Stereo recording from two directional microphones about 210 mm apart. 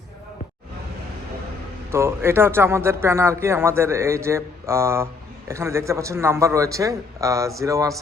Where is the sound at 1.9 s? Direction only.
10° right (ahead or behind).